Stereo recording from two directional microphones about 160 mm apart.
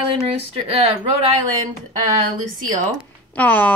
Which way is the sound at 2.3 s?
55° right (ahead or behind).